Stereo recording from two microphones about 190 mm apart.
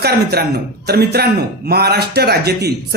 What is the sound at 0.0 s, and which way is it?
Speech, 55° right (ahead or behind).